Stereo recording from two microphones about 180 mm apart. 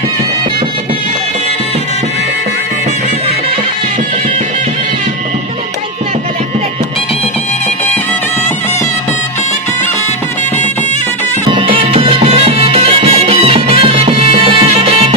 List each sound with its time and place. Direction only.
11.4 s music: 30° right (ahead or behind)